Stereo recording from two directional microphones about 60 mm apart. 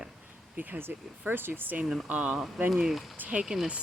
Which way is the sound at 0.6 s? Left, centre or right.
Right.